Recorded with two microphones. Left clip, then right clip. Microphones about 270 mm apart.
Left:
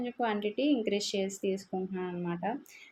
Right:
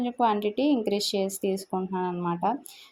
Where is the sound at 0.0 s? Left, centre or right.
Right.